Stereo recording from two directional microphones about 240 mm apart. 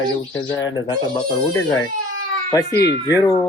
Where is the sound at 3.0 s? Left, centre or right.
Centre.